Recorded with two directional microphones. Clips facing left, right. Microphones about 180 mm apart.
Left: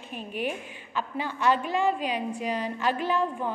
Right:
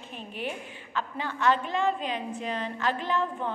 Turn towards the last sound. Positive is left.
turn(degrees=10)  # may be behind; listen again after turning